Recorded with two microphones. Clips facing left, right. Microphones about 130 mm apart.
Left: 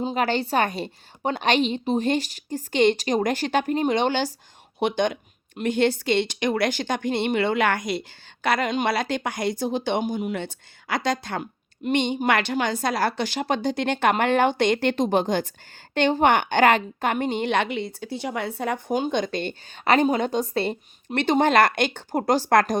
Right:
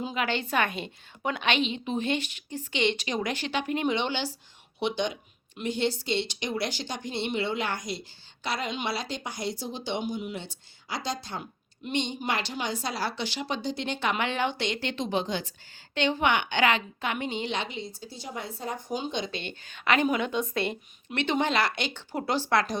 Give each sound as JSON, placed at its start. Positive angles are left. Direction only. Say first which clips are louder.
{"t": 0.0, "sound": "a woman's voice", "louder": "left 6 dB", "side_deg": 40}